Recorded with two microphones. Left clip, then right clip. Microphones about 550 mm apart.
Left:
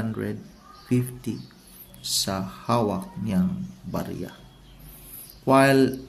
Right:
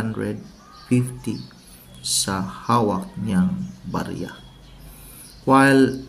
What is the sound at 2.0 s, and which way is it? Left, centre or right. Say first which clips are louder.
Speech: right 3 dB; left.